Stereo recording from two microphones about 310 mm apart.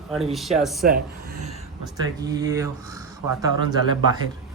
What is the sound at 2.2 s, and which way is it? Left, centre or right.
Speech, centre.